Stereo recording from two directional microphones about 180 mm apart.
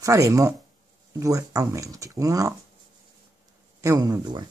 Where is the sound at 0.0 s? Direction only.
15° right (ahead or behind).